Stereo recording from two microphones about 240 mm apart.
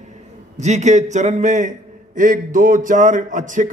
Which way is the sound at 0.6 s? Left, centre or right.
Right.